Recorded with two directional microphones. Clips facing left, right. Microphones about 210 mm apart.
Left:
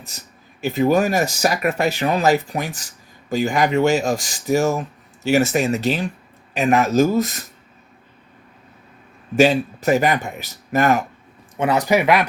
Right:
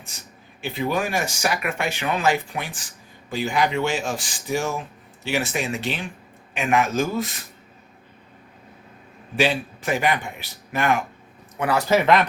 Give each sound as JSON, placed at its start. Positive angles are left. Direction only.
{"t": 0.6, "sound": "speech", "side_deg": 45}
{"t": 9.3, "sound": "speech", "side_deg": 45}
{"t": 11.5, "sound": "speech", "side_deg": 20}